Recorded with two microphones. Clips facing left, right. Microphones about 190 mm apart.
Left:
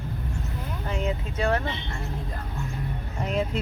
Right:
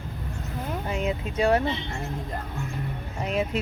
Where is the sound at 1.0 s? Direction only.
10° right (ahead or behind).